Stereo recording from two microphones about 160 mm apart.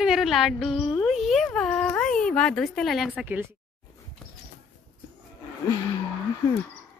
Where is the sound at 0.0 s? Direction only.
Centre (ahead or behind).